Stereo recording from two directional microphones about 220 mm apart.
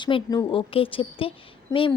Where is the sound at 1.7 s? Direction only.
15° left (ahead or behind).